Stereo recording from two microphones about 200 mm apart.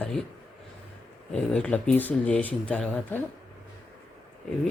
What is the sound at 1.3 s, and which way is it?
Speech, 5° left (ahead or behind).